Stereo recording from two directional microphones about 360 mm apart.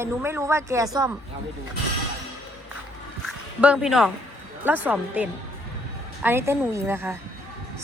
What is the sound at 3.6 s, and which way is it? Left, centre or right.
A woman's voice, centre.